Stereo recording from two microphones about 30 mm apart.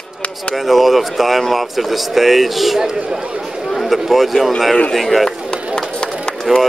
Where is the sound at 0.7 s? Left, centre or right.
Centre.